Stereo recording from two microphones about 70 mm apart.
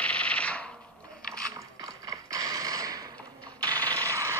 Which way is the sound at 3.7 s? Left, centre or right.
Left.